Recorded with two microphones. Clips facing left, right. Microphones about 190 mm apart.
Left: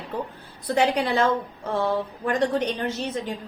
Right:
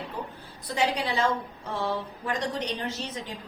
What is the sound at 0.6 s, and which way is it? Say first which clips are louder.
Speech: left 6 dB; 55° left (ahead or behind).